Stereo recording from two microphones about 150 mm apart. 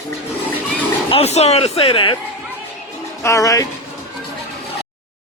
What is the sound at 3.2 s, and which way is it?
Speech, 20° left (ahead or behind).